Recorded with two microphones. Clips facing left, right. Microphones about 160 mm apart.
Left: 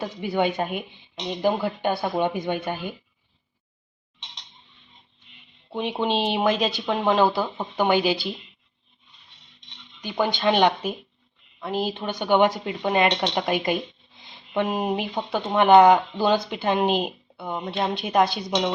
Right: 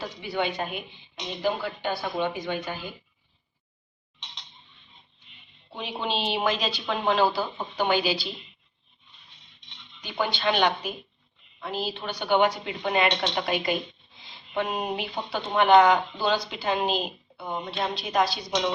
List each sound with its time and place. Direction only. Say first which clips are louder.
0.0 s speech: left 5 dB; 50° left (ahead or behind)
5.7 s speech: left 6 dB; 55° left (ahead or behind)
10.0 s speech: left 4 dB; 45° left (ahead or behind)